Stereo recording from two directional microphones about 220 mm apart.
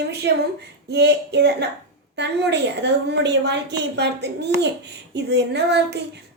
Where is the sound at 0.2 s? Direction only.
50° right (ahead or behind).